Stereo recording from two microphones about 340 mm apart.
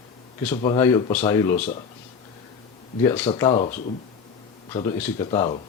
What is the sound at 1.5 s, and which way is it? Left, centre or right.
Speech, left.